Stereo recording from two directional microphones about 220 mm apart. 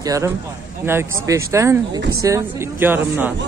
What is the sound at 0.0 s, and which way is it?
Speech, 15° right (ahead or behind).